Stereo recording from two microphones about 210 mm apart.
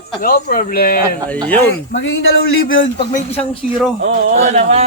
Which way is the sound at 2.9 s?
30° left (ahead or behind).